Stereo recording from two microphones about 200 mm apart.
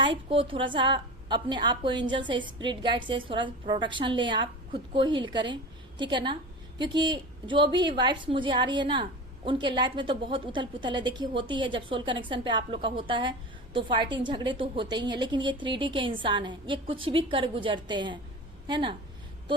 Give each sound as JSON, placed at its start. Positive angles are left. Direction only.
{"t": 0.0, "sound": "a woman's voice", "side_deg": -25}